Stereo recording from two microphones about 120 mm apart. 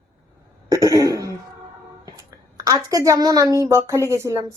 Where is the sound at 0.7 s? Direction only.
30° right (ahead or behind).